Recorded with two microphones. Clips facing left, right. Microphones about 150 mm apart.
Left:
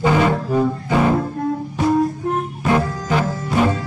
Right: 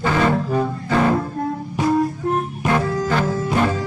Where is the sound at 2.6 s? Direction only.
10° left (ahead or behind).